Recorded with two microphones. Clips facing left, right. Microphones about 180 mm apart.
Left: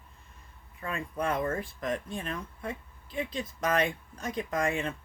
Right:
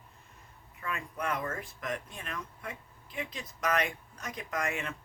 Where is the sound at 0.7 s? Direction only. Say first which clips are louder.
Left 4 dB; 30° left (ahead or behind).